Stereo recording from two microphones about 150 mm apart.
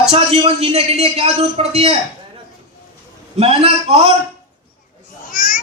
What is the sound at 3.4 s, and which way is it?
Speech, 40° right (ahead or behind).